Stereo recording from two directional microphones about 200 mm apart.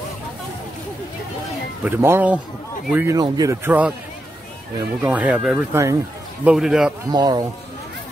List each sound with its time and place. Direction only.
1.9 s speech: 10° right (ahead or behind)
5.0 s speech: 5° right (ahead or behind)
5.7 s speech: 15° right (ahead or behind)
7.1 s speech: 20° right (ahead or behind)